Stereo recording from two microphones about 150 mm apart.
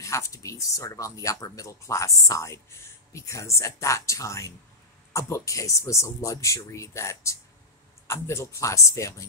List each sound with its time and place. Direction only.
0.0 s speech: 20° left (ahead or behind)